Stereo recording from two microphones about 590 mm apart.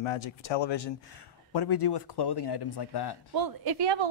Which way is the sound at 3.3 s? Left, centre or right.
Right.